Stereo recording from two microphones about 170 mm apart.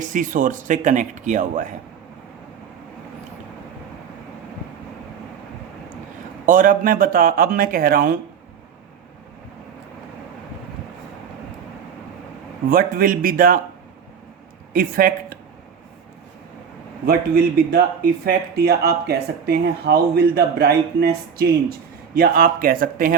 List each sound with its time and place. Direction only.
0.0 s speech: 50° right (ahead or behind)
6.4 s speech: 50° right (ahead or behind)
12.7 s speech: 55° right (ahead or behind)
14.7 s speech: 55° right (ahead or behind)
17.1 s speech: 65° right (ahead or behind)